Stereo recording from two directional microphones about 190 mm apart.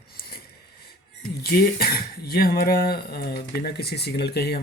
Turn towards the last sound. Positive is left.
turn(degrees=60)  # may be behind; listen again after turning